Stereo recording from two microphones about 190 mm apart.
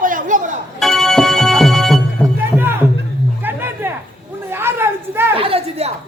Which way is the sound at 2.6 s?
10° right (ahead or behind).